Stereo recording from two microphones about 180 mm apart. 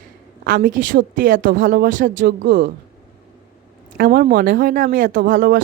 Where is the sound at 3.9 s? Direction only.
55° right (ahead or behind).